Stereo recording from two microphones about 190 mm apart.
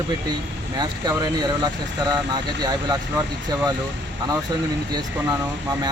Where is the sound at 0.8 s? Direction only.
20° right (ahead or behind).